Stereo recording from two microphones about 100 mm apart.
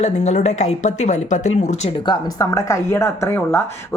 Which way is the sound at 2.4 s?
35° left (ahead or behind).